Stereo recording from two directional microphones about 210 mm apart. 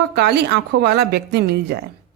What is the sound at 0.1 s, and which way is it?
A woman's voice, 50° right (ahead or behind).